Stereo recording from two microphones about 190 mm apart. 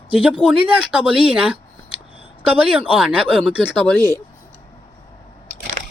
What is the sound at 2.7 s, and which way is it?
Speech, 5° right (ahead or behind).